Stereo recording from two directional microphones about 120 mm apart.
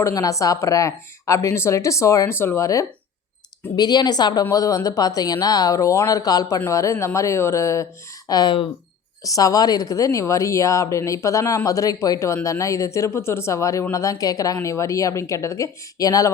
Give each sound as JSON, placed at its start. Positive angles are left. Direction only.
{"t": 0.0, "sound": "a woman's voice", "side_deg": 30}
{"t": 8.3, "sound": "a woman's voice", "side_deg": 35}